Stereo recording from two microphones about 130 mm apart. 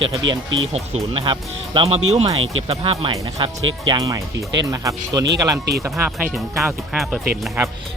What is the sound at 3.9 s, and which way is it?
Speech, 30° right (ahead or behind).